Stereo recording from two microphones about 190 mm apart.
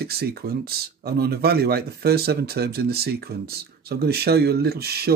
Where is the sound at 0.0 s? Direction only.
55° right (ahead or behind).